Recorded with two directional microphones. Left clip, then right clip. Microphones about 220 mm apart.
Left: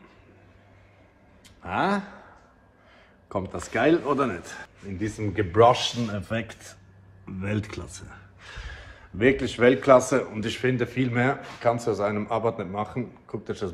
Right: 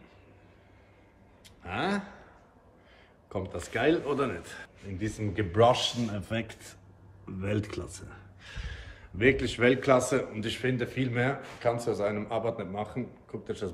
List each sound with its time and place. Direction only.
1.6 s speech: 10° left (ahead or behind)
3.3 s speech: 10° left (ahead or behind)
8.4 s a man's voice: 10° left (ahead or behind)